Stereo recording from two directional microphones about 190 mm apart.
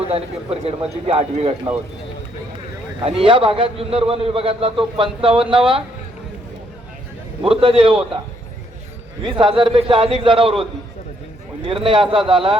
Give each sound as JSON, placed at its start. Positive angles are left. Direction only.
{"t": 0.6, "sound": "a man's voice", "side_deg": -30}
{"t": 3.0, "sound": "a man's voice", "side_deg": -30}
{"t": 7.4, "sound": "a man's voice", "side_deg": -30}
{"t": 9.2, "sound": "a man's voice", "side_deg": -25}